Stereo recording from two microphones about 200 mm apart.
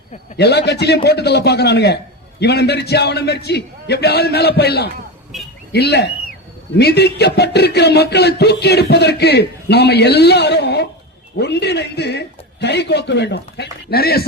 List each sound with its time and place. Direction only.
0.3 s speech: 55° left (ahead or behind)